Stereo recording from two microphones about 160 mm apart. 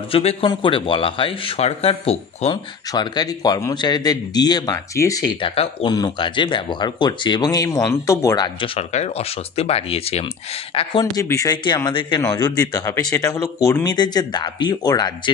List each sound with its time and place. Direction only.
0.1 s speech: 35° left (ahead or behind)
2.9 s speech: 25° left (ahead or behind)
5.5 s speech: 35° left (ahead or behind); by 8.5 s 20° left (ahead or behind)
8.5 s speech: 35° left (ahead or behind)
11.1 s speech: 20° left (ahead or behind)